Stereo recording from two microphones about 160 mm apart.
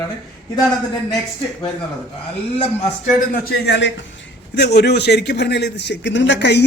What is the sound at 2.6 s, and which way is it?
Speech, 40° left (ahead or behind).